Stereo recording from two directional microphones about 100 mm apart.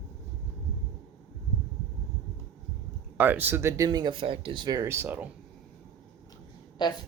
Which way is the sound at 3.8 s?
45° right (ahead or behind).